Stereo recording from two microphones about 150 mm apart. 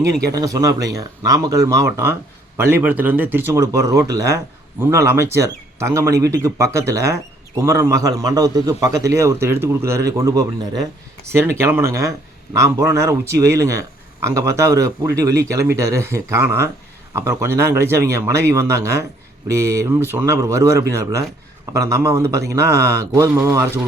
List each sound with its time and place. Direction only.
0.3 s speech: 25° right (ahead or behind)